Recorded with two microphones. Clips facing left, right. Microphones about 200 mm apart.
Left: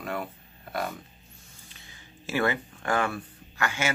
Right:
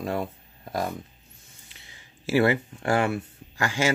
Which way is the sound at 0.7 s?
35° right (ahead or behind).